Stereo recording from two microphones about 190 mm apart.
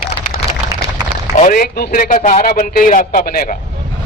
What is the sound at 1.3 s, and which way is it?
A man's voice, 45° left (ahead or behind).